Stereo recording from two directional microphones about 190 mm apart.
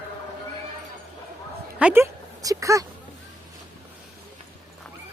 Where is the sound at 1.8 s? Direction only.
15° right (ahead or behind).